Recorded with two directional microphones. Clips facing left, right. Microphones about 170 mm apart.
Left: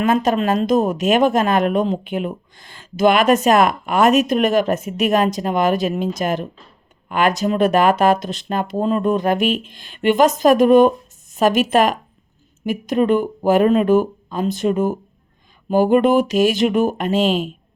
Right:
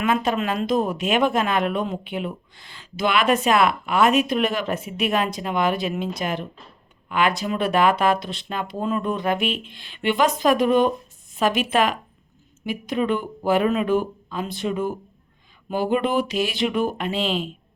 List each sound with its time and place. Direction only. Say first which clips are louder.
0.0 s speech: left 5 dB; 40° left (ahead or behind)